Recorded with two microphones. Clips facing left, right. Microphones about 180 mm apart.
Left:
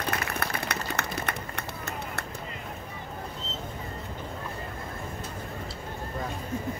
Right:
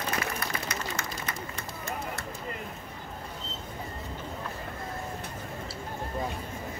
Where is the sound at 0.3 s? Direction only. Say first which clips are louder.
Left 2 dB; 65° left (ahead or behind).